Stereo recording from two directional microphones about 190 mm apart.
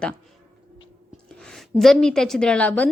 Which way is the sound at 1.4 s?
5° left (ahead or behind).